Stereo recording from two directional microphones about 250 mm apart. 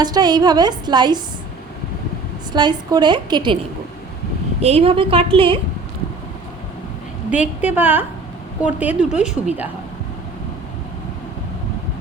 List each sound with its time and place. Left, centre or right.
0.0 s a woman's voice: centre
2.5 s a woman's voice: centre
4.6 s a woman's voice: right
7.3 s a woman's voice: centre